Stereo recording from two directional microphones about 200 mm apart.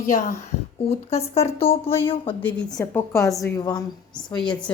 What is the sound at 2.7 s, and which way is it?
A woman's voice, 15° left (ahead or behind).